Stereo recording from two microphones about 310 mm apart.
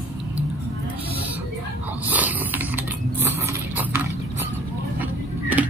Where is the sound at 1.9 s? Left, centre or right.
Centre.